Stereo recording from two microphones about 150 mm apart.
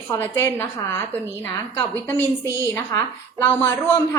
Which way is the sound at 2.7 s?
15° left (ahead or behind).